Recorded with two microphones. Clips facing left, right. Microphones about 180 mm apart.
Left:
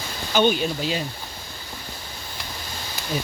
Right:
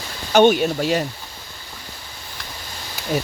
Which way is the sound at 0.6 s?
60° right (ahead or behind).